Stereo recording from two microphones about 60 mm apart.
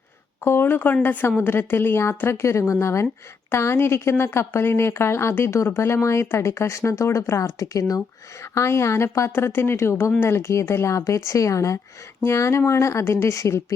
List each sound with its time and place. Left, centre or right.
0.4 s speech: left
8.5 s speech: left
9.3 s speech: left
12.2 s speech: left